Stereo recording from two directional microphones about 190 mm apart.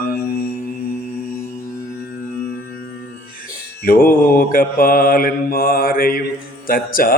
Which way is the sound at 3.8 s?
50° left (ahead or behind).